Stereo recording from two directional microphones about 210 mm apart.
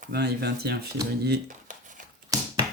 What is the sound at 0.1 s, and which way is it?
Speech, 50° right (ahead or behind).